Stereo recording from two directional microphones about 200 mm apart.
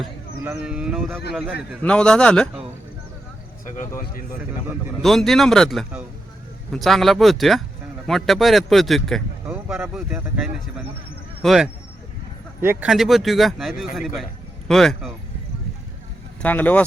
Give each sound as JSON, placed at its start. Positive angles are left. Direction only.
{"t": 0.0, "sound": "speech", "side_deg": -5}
{"t": 3.8, "sound": "speech", "side_deg": 45}
{"t": 5.0, "sound": "speech", "side_deg": 0}
{"t": 16.4, "sound": "speech", "side_deg": 10}